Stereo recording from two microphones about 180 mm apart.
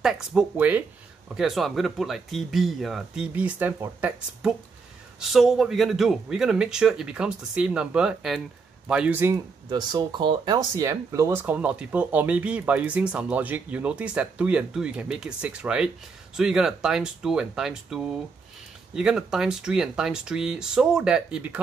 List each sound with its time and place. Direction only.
0.0 s speech: 5° right (ahead or behind)